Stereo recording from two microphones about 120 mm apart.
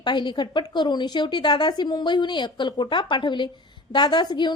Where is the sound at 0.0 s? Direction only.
40° left (ahead or behind).